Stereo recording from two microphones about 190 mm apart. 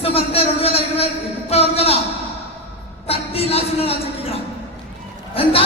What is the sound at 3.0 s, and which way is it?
Speech, 30° left (ahead or behind).